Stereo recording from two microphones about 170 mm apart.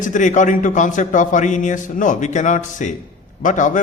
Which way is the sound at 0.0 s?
45° left (ahead or behind).